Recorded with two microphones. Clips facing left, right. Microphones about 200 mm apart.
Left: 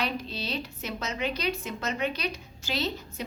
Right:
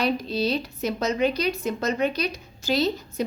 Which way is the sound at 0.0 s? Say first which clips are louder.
Right 8 dB; 40° right (ahead or behind).